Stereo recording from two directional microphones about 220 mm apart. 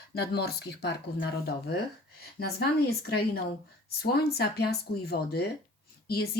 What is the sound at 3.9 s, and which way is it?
Speech, 45° left (ahead or behind).